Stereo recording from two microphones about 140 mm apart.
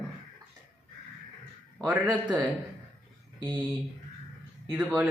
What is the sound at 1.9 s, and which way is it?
Speech, 10° right (ahead or behind).